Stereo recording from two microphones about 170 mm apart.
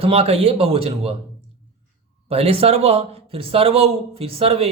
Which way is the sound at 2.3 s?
35° right (ahead or behind).